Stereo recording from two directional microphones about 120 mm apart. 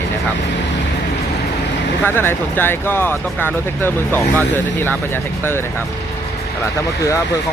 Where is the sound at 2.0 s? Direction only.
20° left (ahead or behind).